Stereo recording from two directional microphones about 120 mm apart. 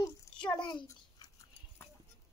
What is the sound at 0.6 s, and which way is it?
Speech, 40° left (ahead or behind).